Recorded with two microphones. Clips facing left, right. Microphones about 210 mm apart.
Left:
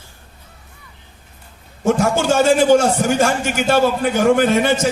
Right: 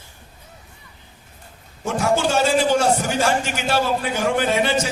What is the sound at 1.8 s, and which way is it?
A man's voice, 50° left (ahead or behind).